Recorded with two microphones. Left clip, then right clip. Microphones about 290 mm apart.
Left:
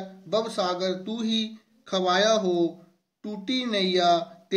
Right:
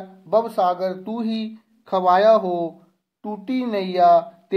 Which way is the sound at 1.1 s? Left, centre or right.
Centre.